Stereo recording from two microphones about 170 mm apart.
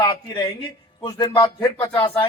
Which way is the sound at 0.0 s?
25° left (ahead or behind).